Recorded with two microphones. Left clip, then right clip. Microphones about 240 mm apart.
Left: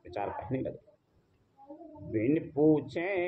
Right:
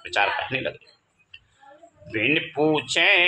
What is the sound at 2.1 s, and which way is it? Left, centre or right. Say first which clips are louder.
Speech: right 8 dB; right.